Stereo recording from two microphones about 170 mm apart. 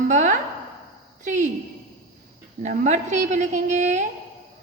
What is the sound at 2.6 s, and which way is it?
A woman's voice, 45° right (ahead or behind).